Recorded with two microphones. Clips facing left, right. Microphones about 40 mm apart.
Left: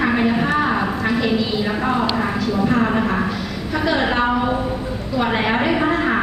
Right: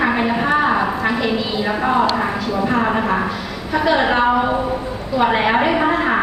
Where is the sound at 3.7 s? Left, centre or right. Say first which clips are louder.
Right 3 dB; centre.